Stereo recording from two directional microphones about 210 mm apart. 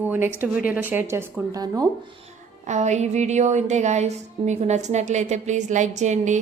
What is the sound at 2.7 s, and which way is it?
A woman's voice, 35° right (ahead or behind).